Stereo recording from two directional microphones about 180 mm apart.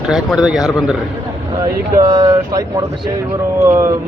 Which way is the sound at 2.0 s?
20° right (ahead or behind).